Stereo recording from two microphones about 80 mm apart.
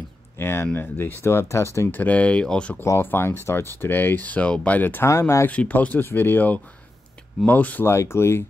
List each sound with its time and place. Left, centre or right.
0.4 s speech: left
2.0 s speech: centre
2.8 s speech: left
5.1 s speech: left
5.5 s speech: centre
7.9 s speech: left